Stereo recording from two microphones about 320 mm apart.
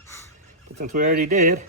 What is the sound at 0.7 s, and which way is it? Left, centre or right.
Speech, right.